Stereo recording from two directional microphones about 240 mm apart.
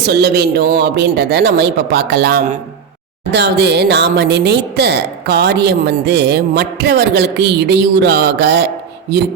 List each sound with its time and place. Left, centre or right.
0.0 s speech: right